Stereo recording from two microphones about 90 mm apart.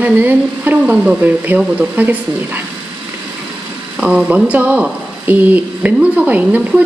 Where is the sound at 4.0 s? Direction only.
10° right (ahead or behind).